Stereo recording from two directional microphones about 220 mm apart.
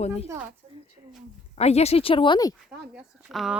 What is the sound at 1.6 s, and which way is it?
Speech, 30° left (ahead or behind).